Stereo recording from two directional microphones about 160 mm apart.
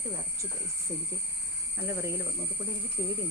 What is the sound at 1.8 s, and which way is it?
Speech, 15° right (ahead or behind).